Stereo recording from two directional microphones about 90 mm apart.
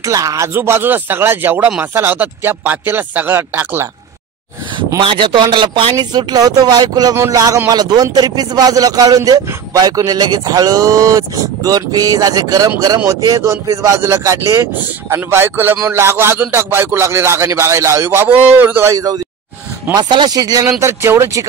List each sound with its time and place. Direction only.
0.0 s speech: 40° right (ahead or behind)
4.7 s a man's voice: 65° right (ahead or behind); by 18.9 s 25° right (ahead or behind)
18.9 s a man's voice: 40° right (ahead or behind)
19.9 s speech: 55° right (ahead or behind)
20.8 s a man's voice: 30° right (ahead or behind)